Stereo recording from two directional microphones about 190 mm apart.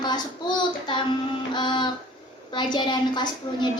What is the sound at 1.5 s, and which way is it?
A woman's voice, 25° left (ahead or behind).